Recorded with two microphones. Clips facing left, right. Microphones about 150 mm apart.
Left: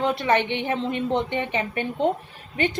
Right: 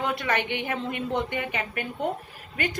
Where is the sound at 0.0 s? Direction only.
30° left (ahead or behind).